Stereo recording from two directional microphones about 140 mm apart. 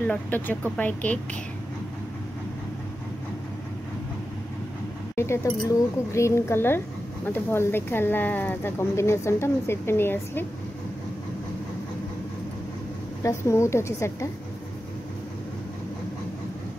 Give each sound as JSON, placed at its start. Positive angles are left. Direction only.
{"t": 0.0, "sound": "speech", "side_deg": 10}
{"t": 5.1, "sound": "a woman's voice", "side_deg": 20}
{"t": 13.2, "sound": "a woman's voice", "side_deg": 20}